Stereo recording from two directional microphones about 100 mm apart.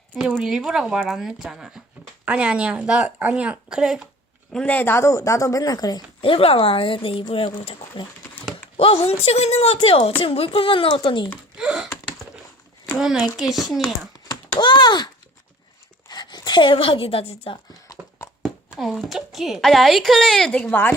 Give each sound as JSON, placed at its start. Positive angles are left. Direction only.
{"t": 0.1, "sound": "speech", "side_deg": -5}
{"t": 4.5, "sound": "speech", "side_deg": 15}
{"t": 6.2, "sound": "speech", "side_deg": 70}
{"t": 8.8, "sound": "speech", "side_deg": 65}
{"t": 11.5, "sound": "speech", "side_deg": -5}
{"t": 13.0, "sound": "speech", "side_deg": -5}
{"t": 14.3, "sound": "a child's voice", "side_deg": 50}
{"t": 18.4, "sound": "speech", "side_deg": 0}